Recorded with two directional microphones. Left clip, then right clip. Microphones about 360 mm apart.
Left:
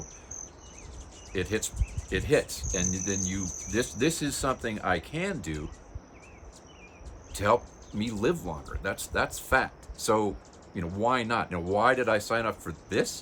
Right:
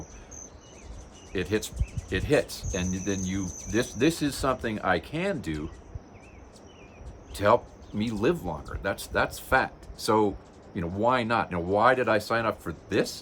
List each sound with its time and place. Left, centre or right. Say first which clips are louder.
1.3 s cricket: right 2 dB; centre
7.3 s cricket: right 3 dB; centre